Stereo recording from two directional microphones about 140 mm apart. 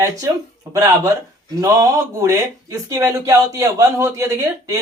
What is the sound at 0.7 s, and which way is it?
Speech, 25° right (ahead or behind).